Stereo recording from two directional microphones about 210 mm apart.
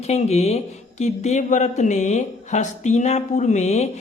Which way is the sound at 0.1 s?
30° left (ahead or behind).